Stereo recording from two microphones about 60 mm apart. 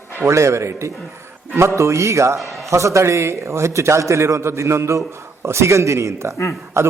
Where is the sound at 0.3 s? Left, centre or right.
Right.